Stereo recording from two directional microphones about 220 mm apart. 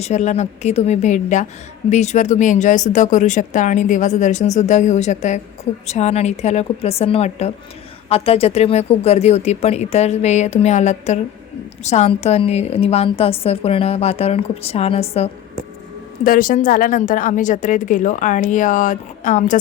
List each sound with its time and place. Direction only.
0.0 s a woman's voice: 30° left (ahead or behind)
16.2 s speech: 40° left (ahead or behind)